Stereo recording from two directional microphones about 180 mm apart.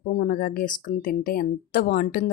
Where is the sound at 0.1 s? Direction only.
50° left (ahead or behind).